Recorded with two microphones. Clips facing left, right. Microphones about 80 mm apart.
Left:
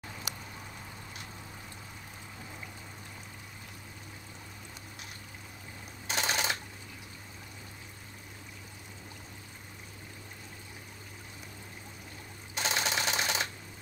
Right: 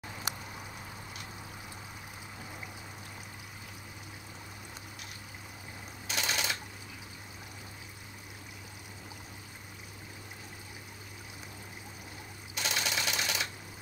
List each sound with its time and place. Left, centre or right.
0.3 s a sound: right
6.0 s typewriter: left
12.5 s sewing machine: left